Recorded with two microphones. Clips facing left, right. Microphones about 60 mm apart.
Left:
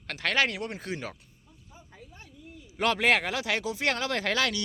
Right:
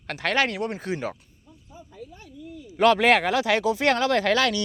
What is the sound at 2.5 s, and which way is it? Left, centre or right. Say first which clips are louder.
Speech: right 9 dB; right.